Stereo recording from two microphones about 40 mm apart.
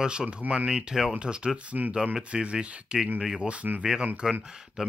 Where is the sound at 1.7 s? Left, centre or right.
Right.